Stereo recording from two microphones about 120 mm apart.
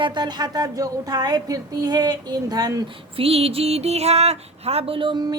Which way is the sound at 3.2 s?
55° right (ahead or behind).